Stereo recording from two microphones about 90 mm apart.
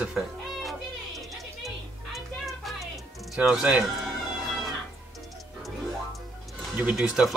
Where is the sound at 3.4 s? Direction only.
5° right (ahead or behind).